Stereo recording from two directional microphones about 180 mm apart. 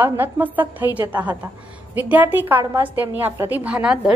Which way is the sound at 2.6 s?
20° right (ahead or behind).